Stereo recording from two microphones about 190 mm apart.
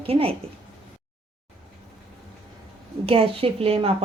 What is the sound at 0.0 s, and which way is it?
Speech, 30° right (ahead or behind).